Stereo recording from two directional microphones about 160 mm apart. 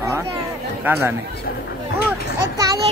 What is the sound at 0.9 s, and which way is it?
Speech, 10° right (ahead or behind).